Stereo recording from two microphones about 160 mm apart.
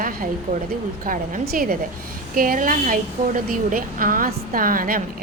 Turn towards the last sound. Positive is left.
turn(degrees=-60)  # may be behind; listen again after turning